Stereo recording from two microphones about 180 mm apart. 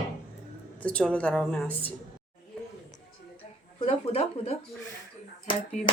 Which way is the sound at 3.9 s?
35° left (ahead or behind).